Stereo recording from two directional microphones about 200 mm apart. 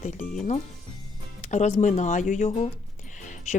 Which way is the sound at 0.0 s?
40° left (ahead or behind).